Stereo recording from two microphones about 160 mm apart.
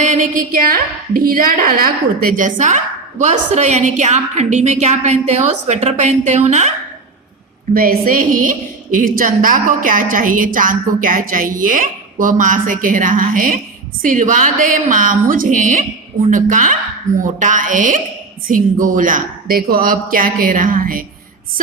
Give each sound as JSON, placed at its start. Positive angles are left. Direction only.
{"t": 0.0, "sound": "a woman's voice", "side_deg": -50}
{"t": 7.7, "sound": "a woman's voice", "side_deg": -65}